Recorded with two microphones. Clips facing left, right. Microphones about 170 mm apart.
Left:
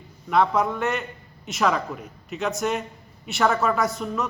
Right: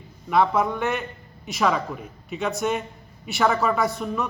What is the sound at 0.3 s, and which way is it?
A man's voice, centre (ahead or behind).